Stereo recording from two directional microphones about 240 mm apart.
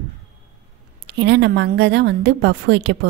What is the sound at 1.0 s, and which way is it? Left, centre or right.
A woman's voice, right.